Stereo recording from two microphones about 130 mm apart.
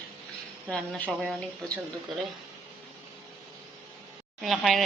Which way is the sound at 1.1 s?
5° right (ahead or behind).